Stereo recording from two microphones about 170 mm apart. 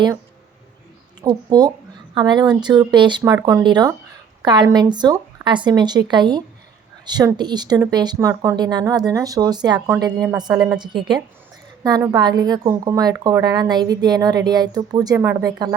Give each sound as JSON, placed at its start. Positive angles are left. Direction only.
{"t": 1.5, "sound": "speech", "side_deg": -25}
{"t": 11.8, "sound": "speech", "side_deg": -20}